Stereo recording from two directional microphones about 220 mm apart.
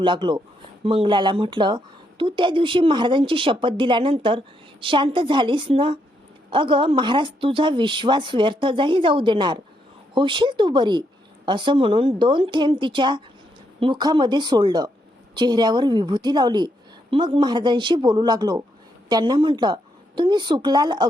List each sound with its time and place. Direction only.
0.0 s a woman's voice: 20° right (ahead or behind)